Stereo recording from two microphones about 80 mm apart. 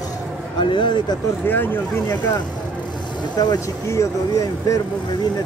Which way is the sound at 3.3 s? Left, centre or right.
Left.